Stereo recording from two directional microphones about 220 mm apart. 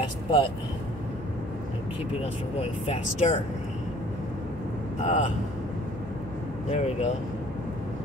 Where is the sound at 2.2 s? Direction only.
30° left (ahead or behind).